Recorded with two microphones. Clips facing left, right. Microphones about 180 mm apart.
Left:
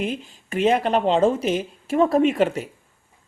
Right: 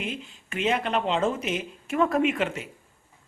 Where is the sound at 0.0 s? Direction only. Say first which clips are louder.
Left 7 dB; 40° left (ahead or behind).